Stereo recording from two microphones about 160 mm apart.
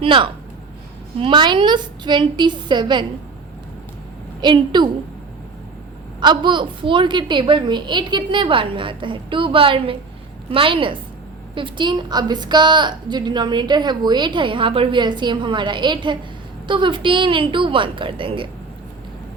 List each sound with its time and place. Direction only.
0.0 s a woman's voice: 30° right (ahead or behind)
4.4 s a woman's voice: 30° right (ahead or behind)
6.1 s a woman's voice: 30° right (ahead or behind)